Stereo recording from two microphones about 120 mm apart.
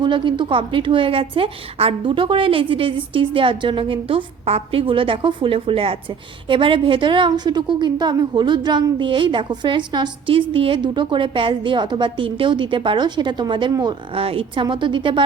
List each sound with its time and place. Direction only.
0.0 s a woman's voice: 40° right (ahead or behind)
14.1 s a woman's voice: 50° right (ahead or behind)